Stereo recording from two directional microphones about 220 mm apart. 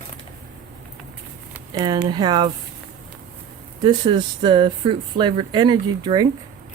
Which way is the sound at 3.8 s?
20° right (ahead or behind).